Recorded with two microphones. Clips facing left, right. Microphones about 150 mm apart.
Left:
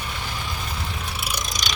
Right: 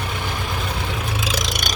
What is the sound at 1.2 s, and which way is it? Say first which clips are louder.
Vehicle: right 6 dB; 90° right.